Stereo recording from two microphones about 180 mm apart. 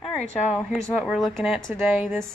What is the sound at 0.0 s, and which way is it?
A woman's voice, centre (ahead or behind).